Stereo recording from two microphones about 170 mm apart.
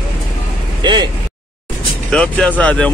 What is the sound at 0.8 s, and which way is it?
Speech, 25° right (ahead or behind).